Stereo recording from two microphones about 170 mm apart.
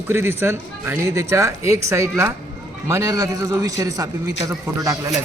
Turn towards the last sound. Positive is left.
turn(degrees=-20)  # may be behind; listen again after turning